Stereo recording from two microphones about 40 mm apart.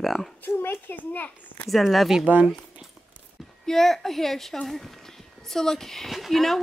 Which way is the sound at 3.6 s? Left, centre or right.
Centre.